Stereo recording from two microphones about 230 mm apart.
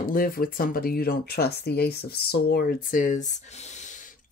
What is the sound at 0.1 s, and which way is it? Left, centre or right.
Speech, left.